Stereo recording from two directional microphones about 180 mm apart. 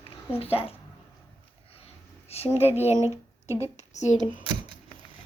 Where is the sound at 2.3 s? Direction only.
35° left (ahead or behind).